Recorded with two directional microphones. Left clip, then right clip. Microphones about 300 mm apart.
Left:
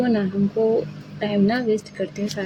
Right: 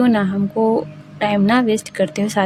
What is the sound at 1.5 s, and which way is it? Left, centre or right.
Speech, right.